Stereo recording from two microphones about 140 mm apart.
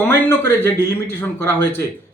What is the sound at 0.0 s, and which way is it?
A man's voice, 15° left (ahead or behind).